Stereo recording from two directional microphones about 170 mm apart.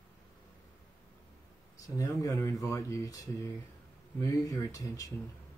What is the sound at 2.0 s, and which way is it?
Speech, 20° left (ahead or behind).